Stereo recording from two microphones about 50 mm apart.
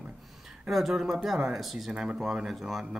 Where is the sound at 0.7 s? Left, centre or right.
Centre.